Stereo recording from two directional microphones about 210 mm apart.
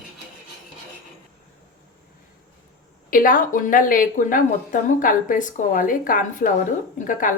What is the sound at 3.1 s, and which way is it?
A woman's voice, 40° left (ahead or behind).